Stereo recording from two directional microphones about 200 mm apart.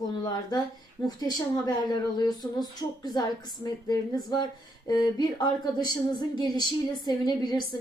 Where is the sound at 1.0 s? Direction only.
20° left (ahead or behind).